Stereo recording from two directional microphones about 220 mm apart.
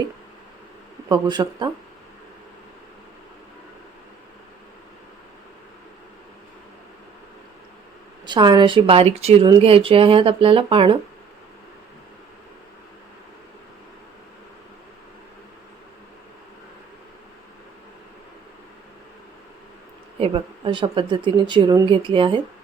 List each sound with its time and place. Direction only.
1.0 s a woman's voice: 20° right (ahead or behind)
8.3 s a woman's voice: 20° right (ahead or behind)
20.1 s a woman's voice: 25° right (ahead or behind)